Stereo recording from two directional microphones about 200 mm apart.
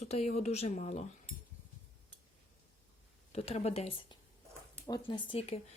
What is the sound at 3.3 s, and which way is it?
Speech, 35° left (ahead or behind).